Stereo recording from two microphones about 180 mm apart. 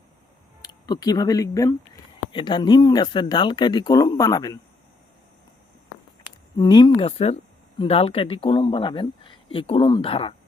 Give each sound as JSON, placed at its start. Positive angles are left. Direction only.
{"t": 0.6, "sound": "speech", "side_deg": 20}
{"t": 6.6, "sound": "speech", "side_deg": 25}